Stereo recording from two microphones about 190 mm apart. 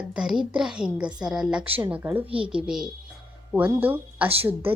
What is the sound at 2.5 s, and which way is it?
A woman's voice, 5° right (ahead or behind).